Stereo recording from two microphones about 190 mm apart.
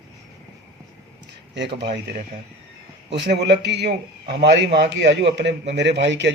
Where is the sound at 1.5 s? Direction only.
65° right (ahead or behind).